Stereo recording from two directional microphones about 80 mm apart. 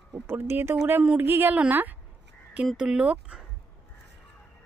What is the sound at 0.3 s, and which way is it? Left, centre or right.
Speech, right.